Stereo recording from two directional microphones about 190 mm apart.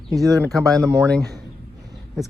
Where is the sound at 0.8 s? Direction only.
15° right (ahead or behind).